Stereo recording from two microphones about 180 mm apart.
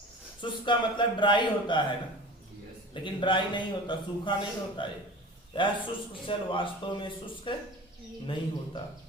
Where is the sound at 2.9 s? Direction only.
25° left (ahead or behind).